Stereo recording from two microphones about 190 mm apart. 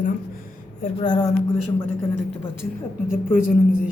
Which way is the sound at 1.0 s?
20° left (ahead or behind).